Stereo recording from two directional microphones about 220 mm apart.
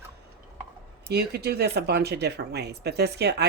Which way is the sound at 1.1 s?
45° right (ahead or behind).